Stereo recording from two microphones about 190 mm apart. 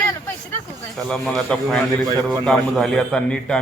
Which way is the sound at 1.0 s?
5° left (ahead or behind).